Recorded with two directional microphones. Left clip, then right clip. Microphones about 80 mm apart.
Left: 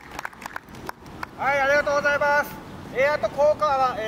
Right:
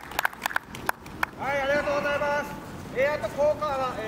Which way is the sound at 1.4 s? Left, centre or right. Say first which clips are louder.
Left 6 dB; left.